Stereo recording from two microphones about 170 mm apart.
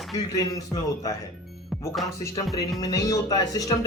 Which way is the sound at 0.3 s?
20° left (ahead or behind).